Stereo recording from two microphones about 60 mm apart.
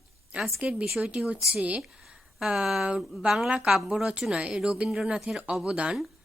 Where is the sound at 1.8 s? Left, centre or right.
Centre.